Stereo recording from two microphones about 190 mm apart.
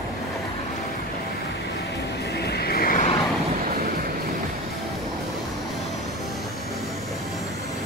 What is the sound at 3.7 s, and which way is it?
Vehicle, 50° right (ahead or behind).